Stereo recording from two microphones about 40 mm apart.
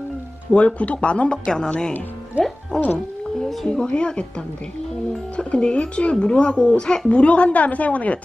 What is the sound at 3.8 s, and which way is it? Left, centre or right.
A woman's voice, left.